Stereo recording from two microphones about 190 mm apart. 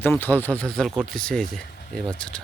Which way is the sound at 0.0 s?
10° left (ahead or behind).